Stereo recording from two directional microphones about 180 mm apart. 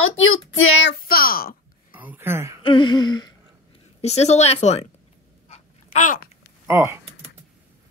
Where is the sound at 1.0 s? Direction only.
55° left (ahead or behind).